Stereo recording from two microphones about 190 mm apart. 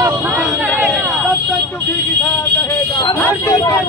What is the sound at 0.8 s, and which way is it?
Alarm, 10° right (ahead or behind).